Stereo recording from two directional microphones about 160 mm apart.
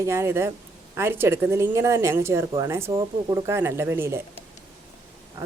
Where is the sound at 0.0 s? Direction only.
15° right (ahead or behind).